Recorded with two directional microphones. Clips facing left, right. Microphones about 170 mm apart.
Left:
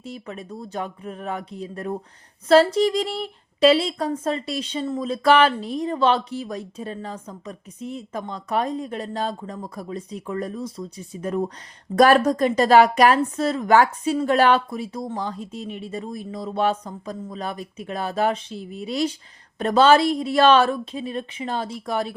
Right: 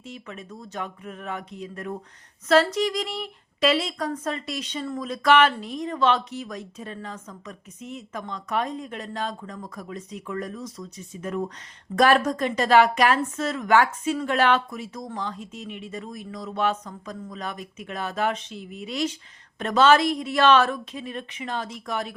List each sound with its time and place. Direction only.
0.0 s speech: 35° left (ahead or behind)